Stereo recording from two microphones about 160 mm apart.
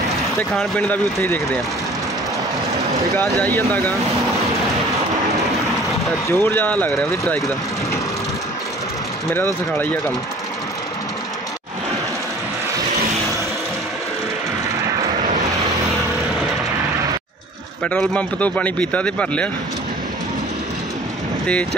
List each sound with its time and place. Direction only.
0.5 s a man's voice: 5° left (ahead or behind)
2.7 s vehicle: 20° right (ahead or behind)
3.3 s speech: centre (ahead or behind)
3.5 s a man's voice: 15° left (ahead or behind)
6.2 s a man's voice: 15° left (ahead or behind)
9.3 s a man's voice: 10° left (ahead or behind)
17.8 s a man's voice: 5° left (ahead or behind)